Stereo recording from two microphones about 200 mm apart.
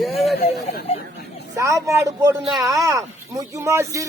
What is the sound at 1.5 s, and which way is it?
Speech, 15° right (ahead or behind).